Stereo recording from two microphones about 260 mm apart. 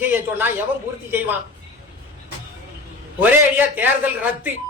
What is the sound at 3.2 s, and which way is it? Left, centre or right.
Speech, centre.